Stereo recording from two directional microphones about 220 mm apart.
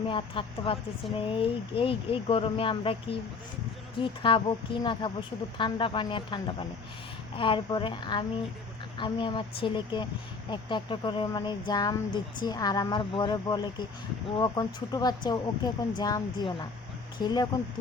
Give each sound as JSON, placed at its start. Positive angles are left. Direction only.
{"t": 0.1, "sound": "speech", "side_deg": 20}